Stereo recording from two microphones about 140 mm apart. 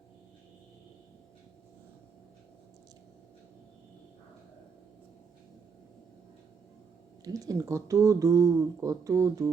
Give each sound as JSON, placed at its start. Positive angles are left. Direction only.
{"t": 7.3, "sound": "speech", "side_deg": -25}